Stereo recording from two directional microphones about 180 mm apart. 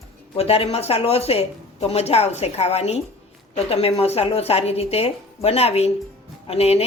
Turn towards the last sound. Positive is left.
turn(degrees=35)  # may be behind; listen again after turning